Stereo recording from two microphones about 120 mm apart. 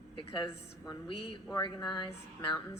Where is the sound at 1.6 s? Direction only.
40° left (ahead or behind).